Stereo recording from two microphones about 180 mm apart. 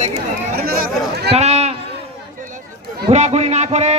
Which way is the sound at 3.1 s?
35° right (ahead or behind).